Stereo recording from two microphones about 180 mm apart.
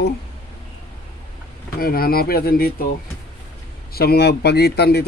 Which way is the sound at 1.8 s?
55° left (ahead or behind).